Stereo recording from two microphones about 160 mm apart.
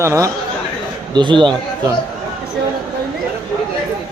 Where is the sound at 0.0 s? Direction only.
20° right (ahead or behind).